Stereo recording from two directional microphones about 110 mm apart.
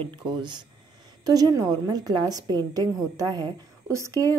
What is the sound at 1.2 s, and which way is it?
A woman's voice, 35° right (ahead or behind).